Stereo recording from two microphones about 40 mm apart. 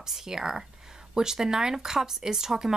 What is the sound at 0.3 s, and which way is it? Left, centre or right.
Speech, centre.